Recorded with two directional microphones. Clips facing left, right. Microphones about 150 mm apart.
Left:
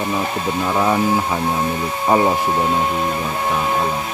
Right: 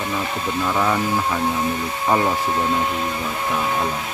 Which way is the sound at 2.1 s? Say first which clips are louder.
Left 4 dB; 20° left (ahead or behind).